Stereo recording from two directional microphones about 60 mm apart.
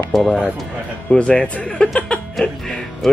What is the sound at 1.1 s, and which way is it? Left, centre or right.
Speech, centre.